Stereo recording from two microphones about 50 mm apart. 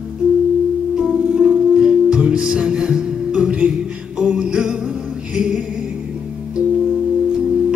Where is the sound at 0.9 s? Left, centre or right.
Centre.